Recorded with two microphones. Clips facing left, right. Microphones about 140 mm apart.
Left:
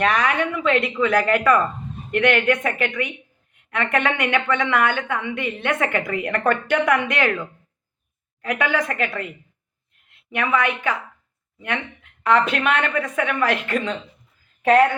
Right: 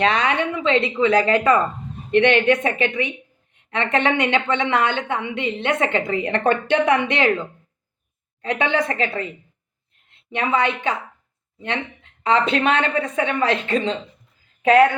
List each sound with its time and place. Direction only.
0.0 s a woman's voice: 25° right (ahead or behind)